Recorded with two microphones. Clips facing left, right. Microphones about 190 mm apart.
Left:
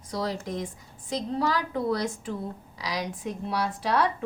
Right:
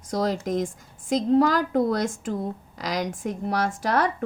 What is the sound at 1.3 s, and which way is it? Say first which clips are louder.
Speech: right 8 dB; 45° right (ahead or behind).